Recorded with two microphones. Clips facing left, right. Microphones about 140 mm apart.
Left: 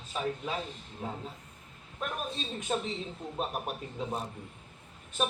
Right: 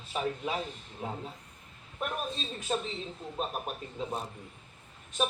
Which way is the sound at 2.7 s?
5° left (ahead or behind).